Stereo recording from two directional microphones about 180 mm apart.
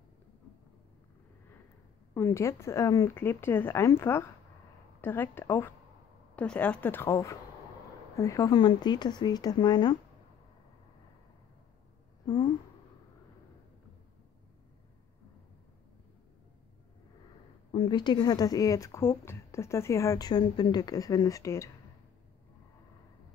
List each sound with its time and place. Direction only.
2.1 s speech: 15° left (ahead or behind)
17.6 s speech: 30° left (ahead or behind)